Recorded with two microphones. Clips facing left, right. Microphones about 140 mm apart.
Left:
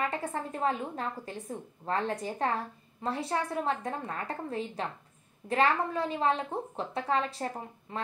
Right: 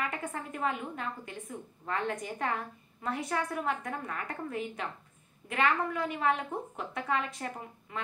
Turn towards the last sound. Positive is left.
turn(degrees=30)  # may be behind; listen again after turning